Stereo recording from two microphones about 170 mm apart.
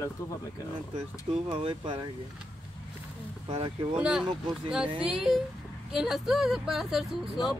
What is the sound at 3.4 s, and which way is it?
Speech, 35° right (ahead or behind).